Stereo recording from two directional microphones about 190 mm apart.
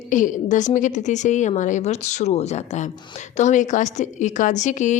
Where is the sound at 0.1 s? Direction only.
45° left (ahead or behind).